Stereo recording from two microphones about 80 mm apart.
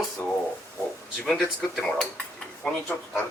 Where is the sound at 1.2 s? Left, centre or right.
Centre.